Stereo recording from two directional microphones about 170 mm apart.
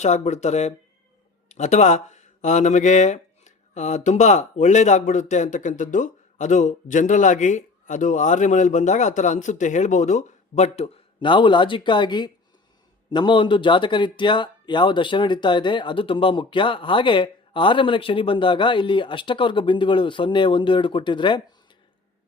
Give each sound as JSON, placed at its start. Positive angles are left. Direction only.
{"t": 0.0, "sound": "speech", "side_deg": 40}